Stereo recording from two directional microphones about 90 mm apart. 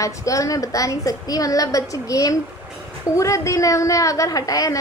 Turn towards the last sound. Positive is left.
turn(degrees=40)  # may be behind; listen again after turning